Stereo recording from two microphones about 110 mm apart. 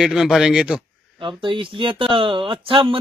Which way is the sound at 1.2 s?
50° right (ahead or behind).